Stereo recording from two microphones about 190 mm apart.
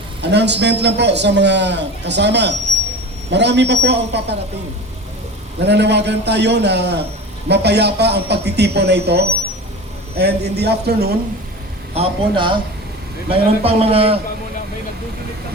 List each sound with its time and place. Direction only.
0.2 s a man's voice: 65° right (ahead or behind)
5.5 s a man's voice: 60° right (ahead or behind)
11.9 s a man's voice: 25° right (ahead or behind)